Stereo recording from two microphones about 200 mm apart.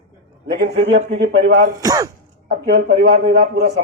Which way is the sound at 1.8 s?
20° right (ahead or behind).